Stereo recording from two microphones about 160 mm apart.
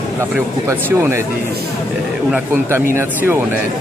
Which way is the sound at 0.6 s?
15° right (ahead or behind).